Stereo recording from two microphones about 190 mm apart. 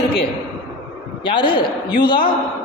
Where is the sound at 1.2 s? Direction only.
25° left (ahead or behind).